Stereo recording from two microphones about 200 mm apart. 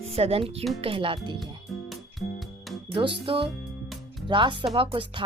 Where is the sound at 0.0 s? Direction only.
30° right (ahead or behind).